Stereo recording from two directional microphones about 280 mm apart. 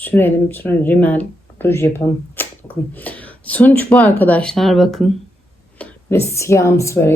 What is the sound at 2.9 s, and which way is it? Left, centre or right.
A woman's voice, centre.